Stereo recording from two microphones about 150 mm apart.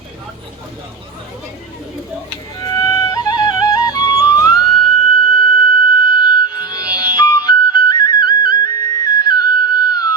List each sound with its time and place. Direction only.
2.6 s music: 25° left (ahead or behind)
6.3 s flute: 30° left (ahead or behind)
9.6 s music: 25° left (ahead or behind)